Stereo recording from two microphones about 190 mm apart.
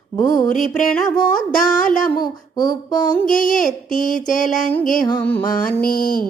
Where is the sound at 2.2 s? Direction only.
20° left (ahead or behind).